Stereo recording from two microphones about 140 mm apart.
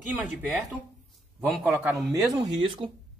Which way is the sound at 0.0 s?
10° right (ahead or behind).